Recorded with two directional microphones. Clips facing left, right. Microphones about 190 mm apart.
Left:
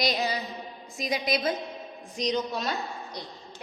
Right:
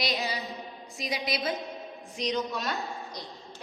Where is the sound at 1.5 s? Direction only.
Centre (ahead or behind).